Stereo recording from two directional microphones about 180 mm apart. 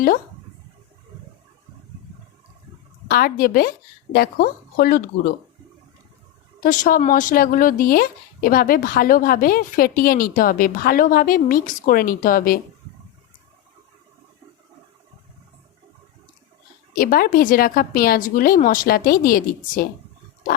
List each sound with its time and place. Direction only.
3.1 s speech: 55° left (ahead or behind)
6.6 s speech: 50° left (ahead or behind)
16.9 s speech: 55° left (ahead or behind)